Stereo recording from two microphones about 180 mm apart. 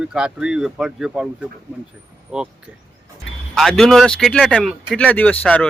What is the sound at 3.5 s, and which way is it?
Speech, centre (ahead or behind).